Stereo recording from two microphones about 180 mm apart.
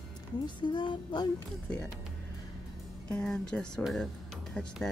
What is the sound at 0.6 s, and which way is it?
Speech, 25° left (ahead or behind).